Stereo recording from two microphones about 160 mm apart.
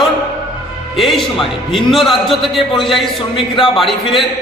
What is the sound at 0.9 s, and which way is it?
A man's voice, centre (ahead or behind).